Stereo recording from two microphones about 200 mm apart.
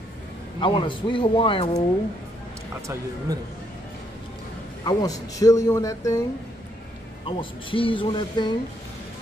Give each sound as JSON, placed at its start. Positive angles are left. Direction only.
{"t": 0.6, "sound": "speech", "side_deg": 25}
{"t": 3.3, "sound": "speech", "side_deg": -15}
{"t": 4.8, "sound": "speech", "side_deg": 20}
{"t": 7.2, "sound": "speech", "side_deg": 25}